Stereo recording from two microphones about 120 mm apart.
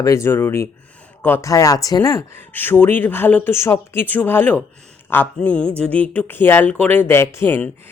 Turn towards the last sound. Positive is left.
turn(degrees=20)  # may be behind; listen again after turning